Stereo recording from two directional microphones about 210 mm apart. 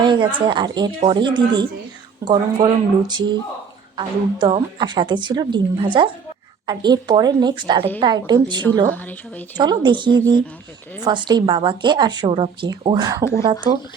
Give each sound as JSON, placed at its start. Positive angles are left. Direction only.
{"t": 0.0, "sound": "a sound", "side_deg": -20}
{"t": 0.3, "sound": "speech", "side_deg": -20}
{"t": 8.9, "sound": "a woman's voice", "side_deg": 5}
{"t": 9.6, "sound": "speech", "side_deg": -20}